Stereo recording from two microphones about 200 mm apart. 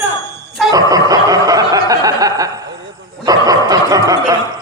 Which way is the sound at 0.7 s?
20° right (ahead or behind).